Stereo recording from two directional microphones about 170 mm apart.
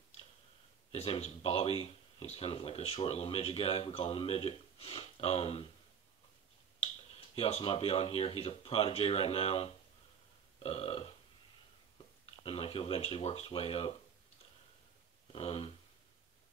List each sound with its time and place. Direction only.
0.9 s speech: 35° left (ahead or behind)
7.3 s speech: 35° left (ahead or behind)
12.4 s speech: 30° left (ahead or behind)
15.3 s speech: 35° left (ahead or behind)